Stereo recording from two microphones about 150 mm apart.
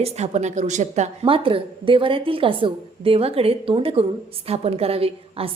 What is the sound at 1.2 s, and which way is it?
A woman's voice, 35° right (ahead or behind).